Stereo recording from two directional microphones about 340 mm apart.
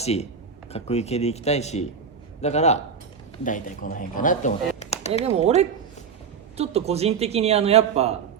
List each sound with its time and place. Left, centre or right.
0.0 s speech: centre
5.2 s speech: centre